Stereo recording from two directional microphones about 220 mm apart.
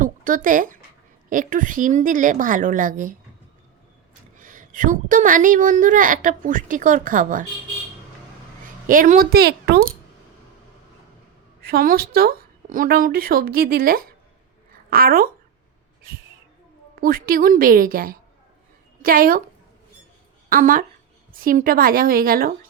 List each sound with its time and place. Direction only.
0.0 s a woman's voice: 40° right (ahead or behind)
4.4 s a woman's voice: 35° right (ahead or behind)
8.9 s a woman's voice: 40° right (ahead or behind)
11.6 s a woman's voice: 40° right (ahead or behind)
20.5 s a woman's voice: 40° right (ahead or behind)